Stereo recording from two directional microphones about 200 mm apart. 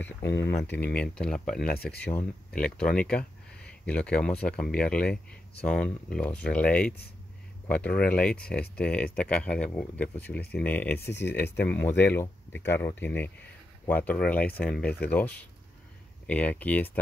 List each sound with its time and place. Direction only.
0.2 s speech: 60° left (ahead or behind)
0.5 s speech: 10° left (ahead or behind)
1.7 s speech: 50° left (ahead or behind)
2.0 s speech: 10° left (ahead or behind)
11.0 s speech: 60° left (ahead or behind)
11.5 s speech: 10° left (ahead or behind)